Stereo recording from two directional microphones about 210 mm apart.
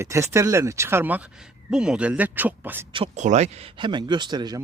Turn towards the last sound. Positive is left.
turn(degrees=-20)  # may be behind; listen again after turning